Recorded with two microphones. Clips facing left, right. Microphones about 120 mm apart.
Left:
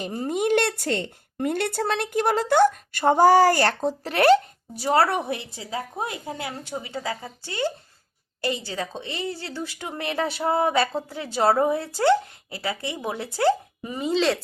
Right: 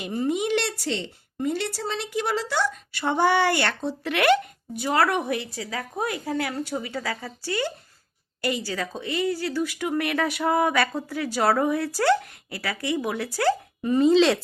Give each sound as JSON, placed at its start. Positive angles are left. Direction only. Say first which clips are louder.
{"t": 0.0, "sound": "speech", "louder": "even", "side_deg": 40}
{"t": 13.9, "sound": "speech", "louder": "right 5 dB", "side_deg": 5}